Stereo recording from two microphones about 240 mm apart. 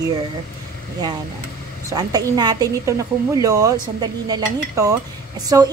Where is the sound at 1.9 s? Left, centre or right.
Centre.